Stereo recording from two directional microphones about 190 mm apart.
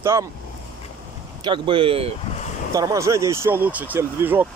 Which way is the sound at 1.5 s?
30° right (ahead or behind).